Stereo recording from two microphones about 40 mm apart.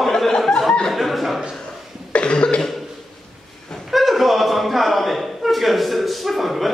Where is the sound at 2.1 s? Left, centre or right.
Left.